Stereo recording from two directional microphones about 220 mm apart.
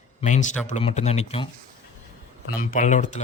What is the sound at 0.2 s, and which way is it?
Speech, 35° left (ahead or behind).